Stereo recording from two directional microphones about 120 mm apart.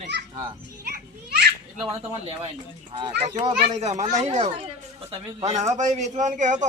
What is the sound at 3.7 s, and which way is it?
A man's voice, 70° right (ahead or behind).